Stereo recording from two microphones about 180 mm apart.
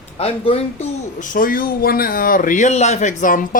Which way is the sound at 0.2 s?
35° left (ahead or behind).